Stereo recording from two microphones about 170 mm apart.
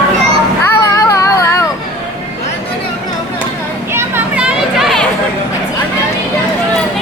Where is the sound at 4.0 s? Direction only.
10° right (ahead or behind).